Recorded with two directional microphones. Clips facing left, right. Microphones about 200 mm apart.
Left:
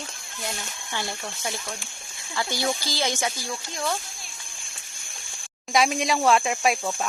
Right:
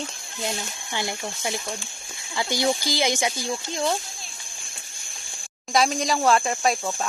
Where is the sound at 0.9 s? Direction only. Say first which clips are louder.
Right 3 dB; 15° right (ahead or behind).